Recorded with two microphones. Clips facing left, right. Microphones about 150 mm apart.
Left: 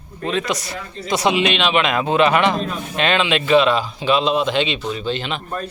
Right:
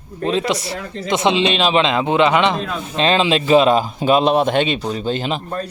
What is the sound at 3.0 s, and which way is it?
A man's voice, 35° right (ahead or behind).